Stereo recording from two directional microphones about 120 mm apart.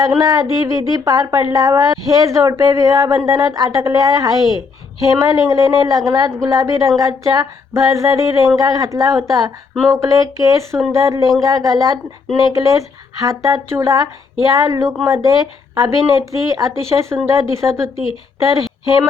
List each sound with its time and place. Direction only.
0.2 s a woman's voice: 30° right (ahead or behind)